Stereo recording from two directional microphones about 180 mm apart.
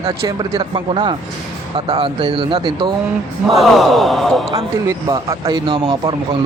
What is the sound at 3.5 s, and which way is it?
Speech, centre (ahead or behind).